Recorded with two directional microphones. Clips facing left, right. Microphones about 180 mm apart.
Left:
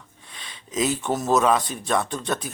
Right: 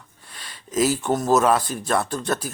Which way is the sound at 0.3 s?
5° right (ahead or behind).